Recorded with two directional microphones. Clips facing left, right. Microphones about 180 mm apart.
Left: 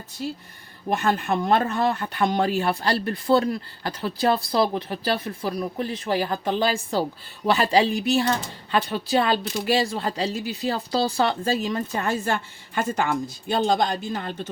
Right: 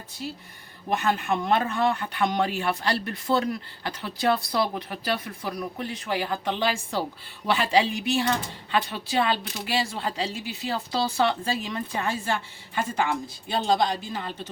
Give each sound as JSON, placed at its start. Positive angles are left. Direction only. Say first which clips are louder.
{"t": 0.9, "sound": "speech", "louder": "left 2 dB", "side_deg": 45}